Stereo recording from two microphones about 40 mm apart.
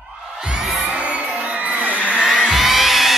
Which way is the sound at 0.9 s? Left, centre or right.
Right.